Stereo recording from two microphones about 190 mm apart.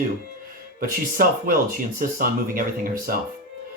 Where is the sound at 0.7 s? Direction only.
50° right (ahead or behind).